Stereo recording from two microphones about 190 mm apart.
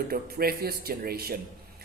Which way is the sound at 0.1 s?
55° right (ahead or behind).